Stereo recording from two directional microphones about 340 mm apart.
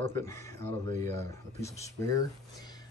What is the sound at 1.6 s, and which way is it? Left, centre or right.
Speech, centre.